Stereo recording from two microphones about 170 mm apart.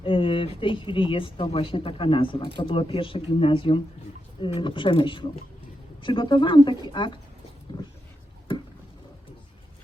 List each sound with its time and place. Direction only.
0.0 s speech: 30° left (ahead or behind)